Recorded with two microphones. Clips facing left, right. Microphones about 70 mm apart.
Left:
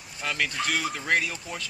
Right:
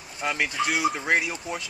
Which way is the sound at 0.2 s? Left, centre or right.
Centre.